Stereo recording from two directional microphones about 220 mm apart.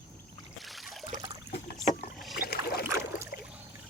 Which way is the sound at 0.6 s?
Centre (ahead or behind).